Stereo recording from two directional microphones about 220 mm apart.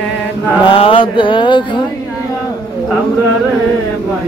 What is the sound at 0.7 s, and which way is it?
Mantra, 25° left (ahead or behind).